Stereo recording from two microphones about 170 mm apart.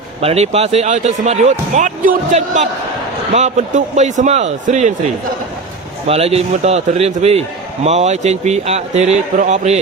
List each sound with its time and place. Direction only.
0.2 s a man's voice: 35° right (ahead or behind)